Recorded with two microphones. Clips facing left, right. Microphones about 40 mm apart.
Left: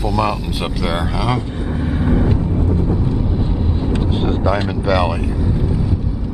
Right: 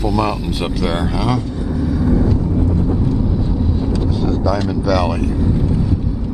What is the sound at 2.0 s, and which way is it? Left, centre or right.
Vehicle, left.